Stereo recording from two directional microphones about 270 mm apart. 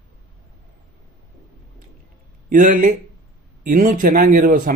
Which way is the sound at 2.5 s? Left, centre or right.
Right.